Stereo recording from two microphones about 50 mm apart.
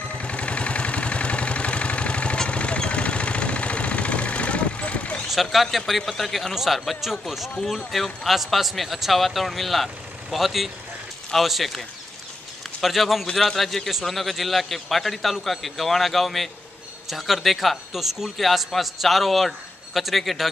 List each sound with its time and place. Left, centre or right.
0.1 s a sound: left
5.3 s a man's voice: centre
12.8 s a man's voice: centre